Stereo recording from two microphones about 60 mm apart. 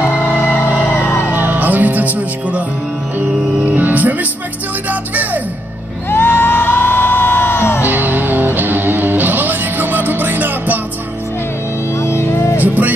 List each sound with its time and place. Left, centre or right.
0.5 s a sound: left
1.3 s music: right
6.0 s music: left
7.8 s music: right
12.0 s music: left